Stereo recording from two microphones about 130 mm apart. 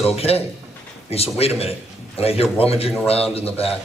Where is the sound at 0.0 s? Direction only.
50° left (ahead or behind).